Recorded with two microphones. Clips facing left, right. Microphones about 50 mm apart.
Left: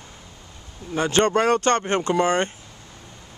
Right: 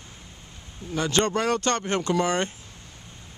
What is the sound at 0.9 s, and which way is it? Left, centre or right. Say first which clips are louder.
Speech: left 4 dB; left.